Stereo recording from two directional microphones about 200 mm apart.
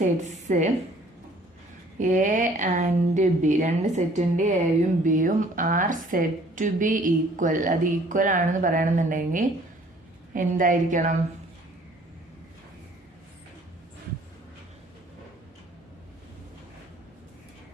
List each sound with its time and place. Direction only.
0.0 s a woman's voice: 35° right (ahead or behind)
2.0 s a woman's voice: 40° right (ahead or behind)